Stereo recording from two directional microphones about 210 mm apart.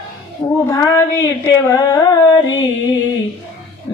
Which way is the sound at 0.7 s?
15° left (ahead or behind).